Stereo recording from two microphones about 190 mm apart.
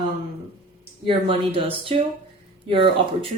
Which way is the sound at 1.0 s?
30° right (ahead or behind).